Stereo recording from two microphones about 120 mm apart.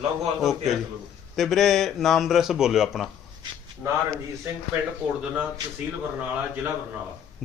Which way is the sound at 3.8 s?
25° right (ahead or behind).